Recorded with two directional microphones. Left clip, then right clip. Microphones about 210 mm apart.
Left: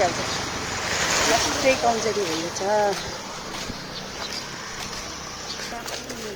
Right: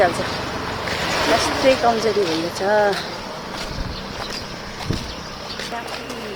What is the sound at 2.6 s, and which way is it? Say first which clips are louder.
Speech: right 4 dB; 5° right (ahead or behind).